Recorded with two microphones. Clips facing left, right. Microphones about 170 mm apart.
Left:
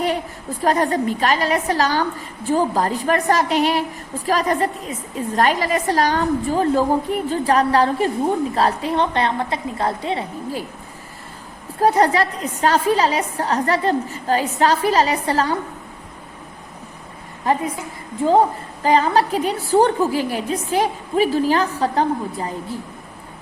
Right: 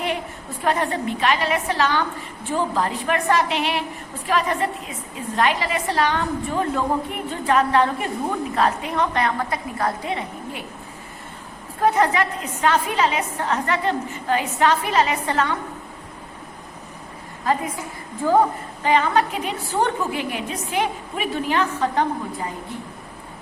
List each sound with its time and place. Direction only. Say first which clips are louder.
0.6 s a woman's voice: left 4 dB; 40° left (ahead or behind)
11.8 s a woman's voice: left 3 dB; 35° left (ahead or behind)
18.3 s a woman's voice: left 2 dB; 30° left (ahead or behind)